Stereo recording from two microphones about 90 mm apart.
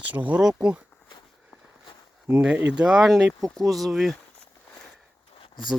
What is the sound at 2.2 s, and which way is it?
Speech, 15° right (ahead or behind).